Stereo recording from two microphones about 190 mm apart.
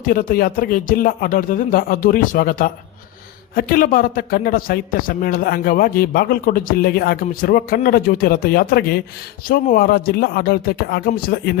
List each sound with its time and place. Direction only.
0.0 s a man's voice: 50° left (ahead or behind)